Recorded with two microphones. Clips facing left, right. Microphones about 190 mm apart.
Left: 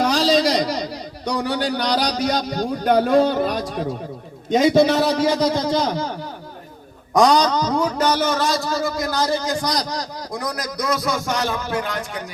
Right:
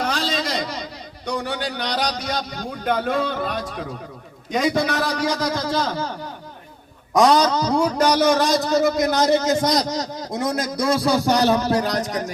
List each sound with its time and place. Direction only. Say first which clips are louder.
0.0 s a sound: left 7 dB; 40° left (ahead or behind)
4.5 s a man's voice: left 6 dB; 25° left (ahead or behind)
7.1 s a man's voice: even; centre (ahead or behind); by 12.2 s 40° right (ahead or behind)